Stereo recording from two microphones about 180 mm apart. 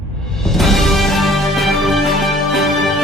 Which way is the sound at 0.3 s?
Centre (ahead or behind).